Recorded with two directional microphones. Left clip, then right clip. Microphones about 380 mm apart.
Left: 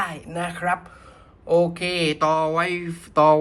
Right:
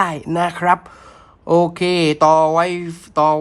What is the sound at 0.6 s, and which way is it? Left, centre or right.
Speech, right.